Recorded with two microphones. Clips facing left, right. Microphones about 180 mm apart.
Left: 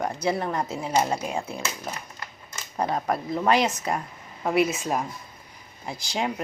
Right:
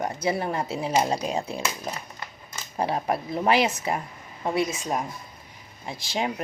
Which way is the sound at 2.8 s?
25° right (ahead or behind).